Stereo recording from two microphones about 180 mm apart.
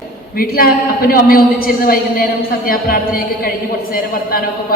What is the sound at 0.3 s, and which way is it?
A woman's voice, 55° left (ahead or behind).